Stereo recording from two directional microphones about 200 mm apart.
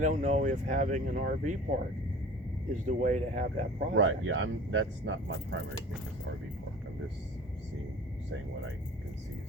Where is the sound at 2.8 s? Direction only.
35° right (ahead or behind).